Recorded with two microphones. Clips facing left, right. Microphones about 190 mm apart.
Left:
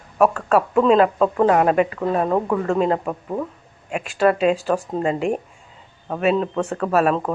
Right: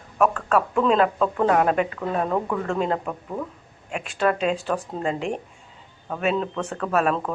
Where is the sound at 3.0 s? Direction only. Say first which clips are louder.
Left 5 dB; 25° left (ahead or behind).